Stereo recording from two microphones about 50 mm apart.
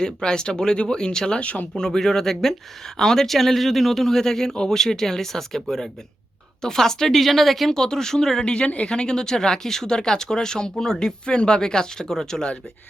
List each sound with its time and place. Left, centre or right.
0.0 s speech: centre
1.4 s speech: left
1.7 s speech: centre
8.5 s speech: left